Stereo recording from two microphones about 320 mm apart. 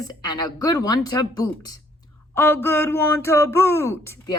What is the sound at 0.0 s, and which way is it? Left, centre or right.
Speech, centre.